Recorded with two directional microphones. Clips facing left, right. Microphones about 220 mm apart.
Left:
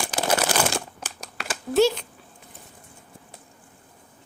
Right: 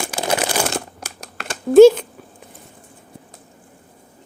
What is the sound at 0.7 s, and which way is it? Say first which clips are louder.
Crumpling: right 3 dB; 10° right (ahead or behind).